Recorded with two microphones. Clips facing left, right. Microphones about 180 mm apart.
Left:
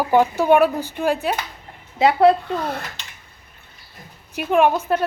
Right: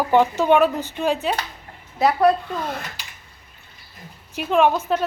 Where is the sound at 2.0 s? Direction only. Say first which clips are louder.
Left 3 dB; 25° left (ahead or behind).